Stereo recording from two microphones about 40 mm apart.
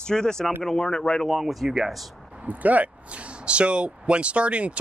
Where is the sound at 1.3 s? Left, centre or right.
Centre.